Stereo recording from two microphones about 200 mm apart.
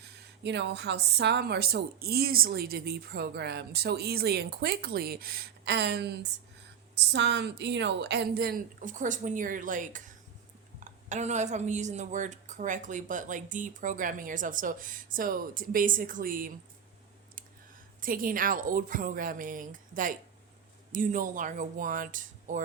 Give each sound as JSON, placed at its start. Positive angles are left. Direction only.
{"t": 0.0, "sound": "a woman's voice", "side_deg": -60}
{"t": 18.0, "sound": "a woman's voice", "side_deg": -45}